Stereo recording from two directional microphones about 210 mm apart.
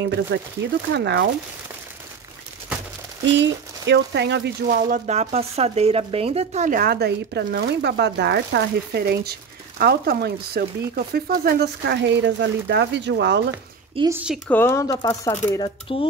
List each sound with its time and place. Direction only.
0.0 s speech: 55° right (ahead or behind)
3.3 s speech: 55° right (ahead or behind)
13.5 s speech: 15° right (ahead or behind)
14.5 s speech: 10° left (ahead or behind)